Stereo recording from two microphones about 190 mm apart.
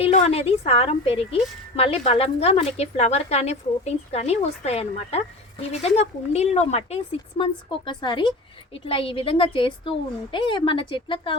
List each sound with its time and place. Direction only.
0.0 s a woman's voice: 35° left (ahead or behind)